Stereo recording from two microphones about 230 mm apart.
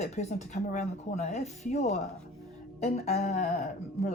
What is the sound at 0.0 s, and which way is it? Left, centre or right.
Speech, left.